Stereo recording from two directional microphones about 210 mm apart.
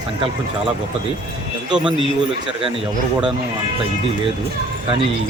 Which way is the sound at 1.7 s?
5° right (ahead or behind).